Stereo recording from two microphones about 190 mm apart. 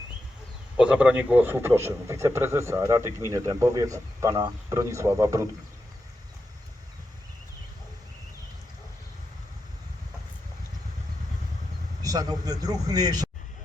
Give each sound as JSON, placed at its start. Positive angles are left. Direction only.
{"t": 0.8, "sound": "a man's voice", "side_deg": -5}
{"t": 12.0, "sound": "speech", "side_deg": -20}